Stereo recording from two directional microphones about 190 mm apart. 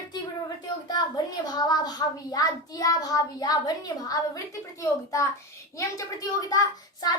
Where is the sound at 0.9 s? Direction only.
20° left (ahead or behind).